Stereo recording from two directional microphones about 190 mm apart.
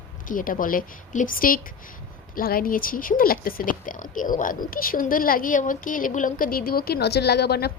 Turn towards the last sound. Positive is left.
turn(degrees=60)  # may be behind; listen again after turning